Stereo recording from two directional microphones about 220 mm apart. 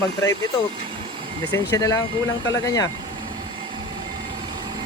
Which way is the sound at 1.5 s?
15° left (ahead or behind).